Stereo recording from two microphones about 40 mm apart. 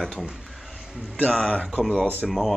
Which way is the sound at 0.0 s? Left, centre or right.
Centre.